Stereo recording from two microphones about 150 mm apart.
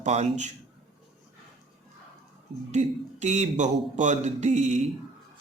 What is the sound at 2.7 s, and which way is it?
Speech, 50° right (ahead or behind).